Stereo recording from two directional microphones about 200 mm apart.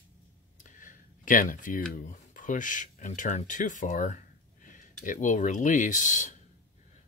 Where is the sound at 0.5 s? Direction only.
40° left (ahead or behind).